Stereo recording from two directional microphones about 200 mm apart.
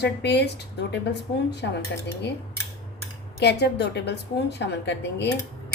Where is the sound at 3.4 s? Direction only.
55° left (ahead or behind).